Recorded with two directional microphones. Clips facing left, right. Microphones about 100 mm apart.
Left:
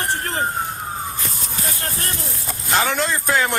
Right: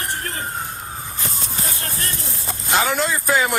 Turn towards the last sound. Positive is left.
turn(degrees=-5)  # may be behind; listen again after turning